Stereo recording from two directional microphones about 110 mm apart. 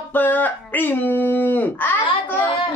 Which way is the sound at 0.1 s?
15° left (ahead or behind).